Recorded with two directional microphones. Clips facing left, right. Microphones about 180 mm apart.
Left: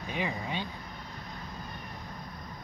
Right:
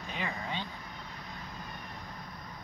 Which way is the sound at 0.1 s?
15° left (ahead or behind).